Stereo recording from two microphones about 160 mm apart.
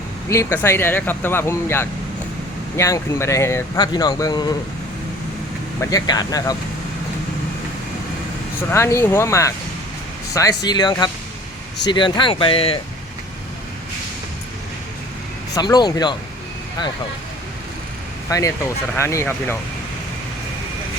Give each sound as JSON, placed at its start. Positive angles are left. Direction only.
{"t": 0.3, "sound": "speech", "side_deg": 15}
{"t": 5.8, "sound": "speech", "side_deg": 25}
{"t": 8.7, "sound": "speech", "side_deg": 15}
{"t": 15.5, "sound": "speech", "side_deg": 25}
{"t": 18.3, "sound": "speech", "side_deg": 20}